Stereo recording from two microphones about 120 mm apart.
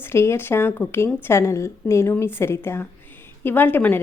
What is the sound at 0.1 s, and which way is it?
Speech, 20° left (ahead or behind).